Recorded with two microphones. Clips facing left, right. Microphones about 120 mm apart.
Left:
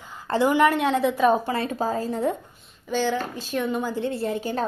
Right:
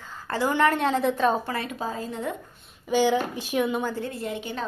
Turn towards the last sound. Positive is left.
turn(degrees=40)  # may be behind; listen again after turning